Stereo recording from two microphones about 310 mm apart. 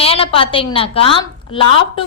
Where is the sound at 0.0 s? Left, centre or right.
Centre.